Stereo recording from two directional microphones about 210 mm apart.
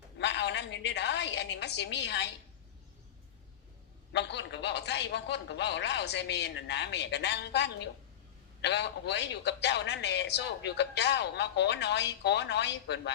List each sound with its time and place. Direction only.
0.2 s a woman's voice: 55° left (ahead or behind)
4.1 s a man's voice: 55° left (ahead or behind)